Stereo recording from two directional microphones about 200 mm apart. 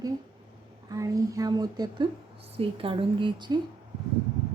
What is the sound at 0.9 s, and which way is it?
A woman's voice, 15° right (ahead or behind).